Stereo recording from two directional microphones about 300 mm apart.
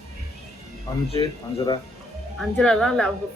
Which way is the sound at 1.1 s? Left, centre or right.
Centre.